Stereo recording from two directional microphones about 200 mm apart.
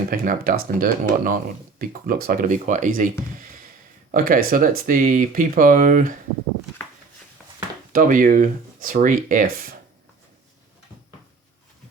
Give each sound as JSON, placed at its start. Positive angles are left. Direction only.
{"t": 0.1, "sound": "speech", "side_deg": -45}
{"t": 7.9, "sound": "speech", "side_deg": -40}